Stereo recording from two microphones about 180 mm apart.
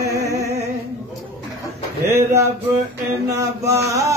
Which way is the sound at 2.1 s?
15° right (ahead or behind).